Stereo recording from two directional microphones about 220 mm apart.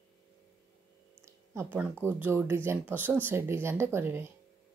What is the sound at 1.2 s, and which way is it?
A woman's voice, 10° right (ahead or behind).